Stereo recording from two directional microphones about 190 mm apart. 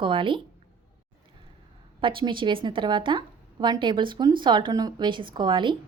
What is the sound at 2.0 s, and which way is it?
A woman's voice, 25° right (ahead or behind).